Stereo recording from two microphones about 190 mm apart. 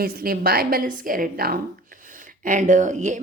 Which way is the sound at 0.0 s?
50° right (ahead or behind).